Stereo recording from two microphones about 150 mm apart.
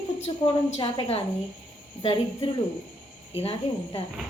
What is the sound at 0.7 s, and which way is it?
A woman's voice, 40° left (ahead or behind).